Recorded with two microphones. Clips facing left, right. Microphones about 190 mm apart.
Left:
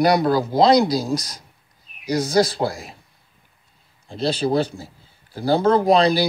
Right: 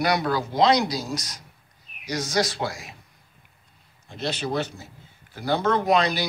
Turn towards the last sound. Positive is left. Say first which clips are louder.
# left 6 dB
turn(degrees=30)  # may be behind; listen again after turning